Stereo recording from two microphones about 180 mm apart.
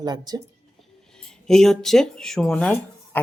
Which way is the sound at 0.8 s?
5° left (ahead or behind).